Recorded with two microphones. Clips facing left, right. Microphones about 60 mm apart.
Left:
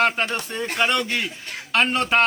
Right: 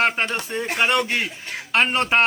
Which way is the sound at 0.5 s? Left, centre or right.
Centre.